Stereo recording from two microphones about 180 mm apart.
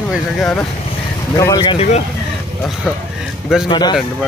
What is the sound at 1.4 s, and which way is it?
Speech, 20° left (ahead or behind).